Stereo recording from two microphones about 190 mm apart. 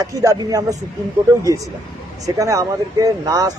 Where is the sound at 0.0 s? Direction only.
15° right (ahead or behind).